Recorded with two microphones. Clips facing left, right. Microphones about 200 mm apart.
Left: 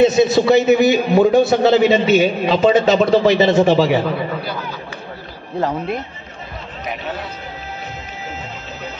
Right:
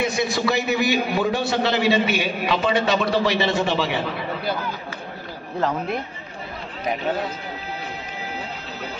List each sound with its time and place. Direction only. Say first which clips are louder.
0.0 s a man's voice: left 10 dB; 20° left (ahead or behind)
3.6 s speech: left 9 dB; 40° left (ahead or behind)